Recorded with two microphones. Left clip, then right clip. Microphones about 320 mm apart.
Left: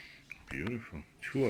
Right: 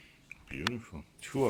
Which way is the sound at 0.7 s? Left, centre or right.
Centre.